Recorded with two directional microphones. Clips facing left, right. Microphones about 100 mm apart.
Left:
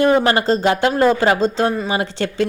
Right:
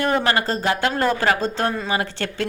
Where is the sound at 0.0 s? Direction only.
20° left (ahead or behind).